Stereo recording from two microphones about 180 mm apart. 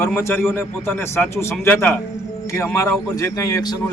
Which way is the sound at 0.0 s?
15° left (ahead or behind).